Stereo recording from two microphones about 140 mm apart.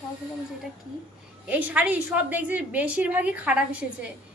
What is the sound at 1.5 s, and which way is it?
A woman's voice, 10° right (ahead or behind).